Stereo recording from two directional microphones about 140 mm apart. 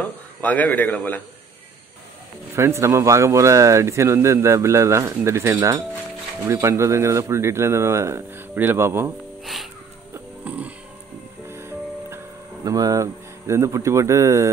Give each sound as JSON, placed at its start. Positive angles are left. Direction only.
{"t": 0.0, "sound": "a man's voice", "side_deg": 10}
{"t": 2.5, "sound": "speech", "side_deg": -20}
{"t": 9.4, "sound": "music", "side_deg": 0}
{"t": 10.1, "sound": "music", "side_deg": -10}
{"t": 12.6, "sound": "speech", "side_deg": -25}